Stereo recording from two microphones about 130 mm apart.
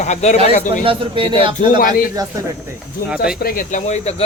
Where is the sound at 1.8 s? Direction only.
90° left.